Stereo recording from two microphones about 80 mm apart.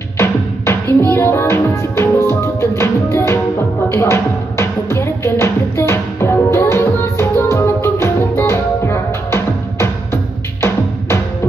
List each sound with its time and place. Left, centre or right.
0.2 s drum: left
1.1 s music: left